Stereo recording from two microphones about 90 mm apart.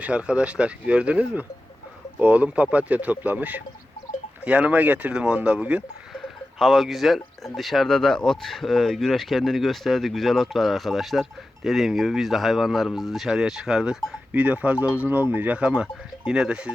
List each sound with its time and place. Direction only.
0.0 s speech: 10° right (ahead or behind)
6.1 s speech: centre (ahead or behind)
14.4 s speech: 15° right (ahead or behind)